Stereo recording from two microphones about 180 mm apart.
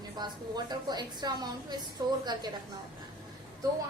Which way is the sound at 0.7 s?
25° right (ahead or behind).